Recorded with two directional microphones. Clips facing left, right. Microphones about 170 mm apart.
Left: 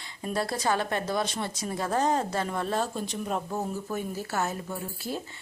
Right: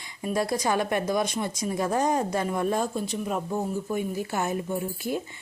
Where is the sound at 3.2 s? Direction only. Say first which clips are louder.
Even; centre (ahead or behind).